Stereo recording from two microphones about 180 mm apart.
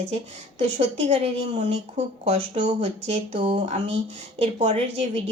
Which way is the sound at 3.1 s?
35° right (ahead or behind).